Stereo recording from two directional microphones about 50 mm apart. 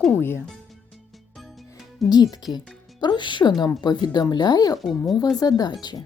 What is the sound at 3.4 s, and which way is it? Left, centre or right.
Speech, left.